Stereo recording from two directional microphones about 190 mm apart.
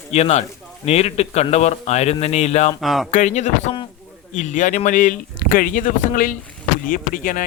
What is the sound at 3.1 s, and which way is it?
A man's voice, 40° left (ahead or behind).